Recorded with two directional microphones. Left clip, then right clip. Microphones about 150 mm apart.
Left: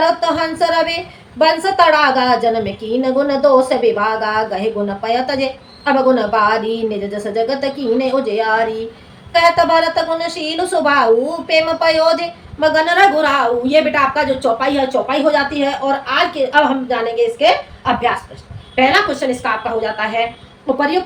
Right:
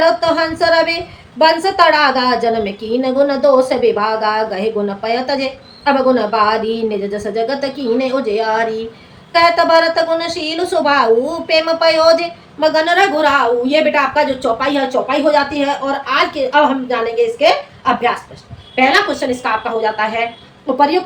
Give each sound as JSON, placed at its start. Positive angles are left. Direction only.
{"t": 0.0, "sound": "a woman's voice", "side_deg": -20}